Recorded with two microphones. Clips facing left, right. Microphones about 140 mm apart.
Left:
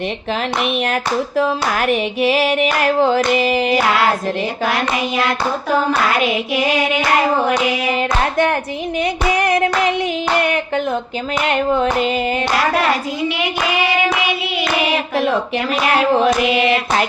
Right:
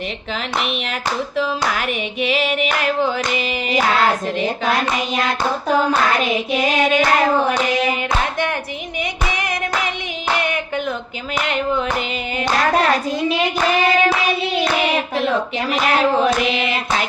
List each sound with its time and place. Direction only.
1.4 s a sound: 45° left (ahead or behind)
8.2 s clapping: 40° left (ahead or behind)
11.4 s clapping: 40° left (ahead or behind)